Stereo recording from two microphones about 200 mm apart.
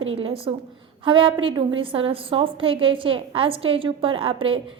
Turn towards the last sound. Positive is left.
turn(degrees=-25)  # may be behind; listen again after turning